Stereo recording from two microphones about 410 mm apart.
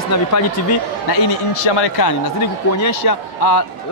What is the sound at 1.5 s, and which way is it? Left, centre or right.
Speech, left.